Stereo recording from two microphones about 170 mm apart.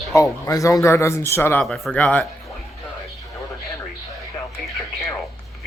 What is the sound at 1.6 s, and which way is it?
Speech, centre (ahead or behind).